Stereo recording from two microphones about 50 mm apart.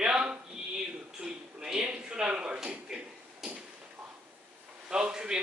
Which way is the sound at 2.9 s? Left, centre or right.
Centre.